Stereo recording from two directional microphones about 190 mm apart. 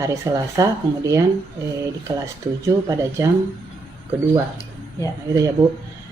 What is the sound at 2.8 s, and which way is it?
Speech, 20° right (ahead or behind).